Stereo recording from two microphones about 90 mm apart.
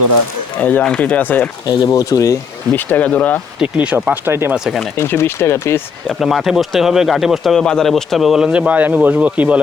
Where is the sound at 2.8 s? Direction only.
20° left (ahead or behind).